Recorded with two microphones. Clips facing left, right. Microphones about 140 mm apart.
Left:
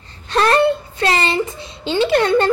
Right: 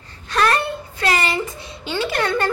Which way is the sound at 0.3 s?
25° left (ahead or behind).